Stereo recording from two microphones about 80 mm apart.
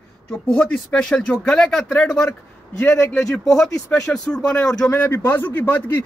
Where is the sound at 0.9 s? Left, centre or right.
Centre.